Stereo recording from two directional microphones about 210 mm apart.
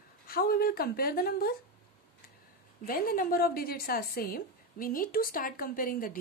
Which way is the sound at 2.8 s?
45° left (ahead or behind).